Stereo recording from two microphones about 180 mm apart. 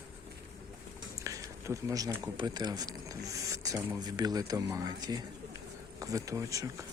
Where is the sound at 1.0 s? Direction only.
20° right (ahead or behind).